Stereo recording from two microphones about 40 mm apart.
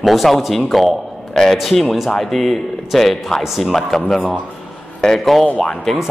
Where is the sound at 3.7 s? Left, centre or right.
Centre.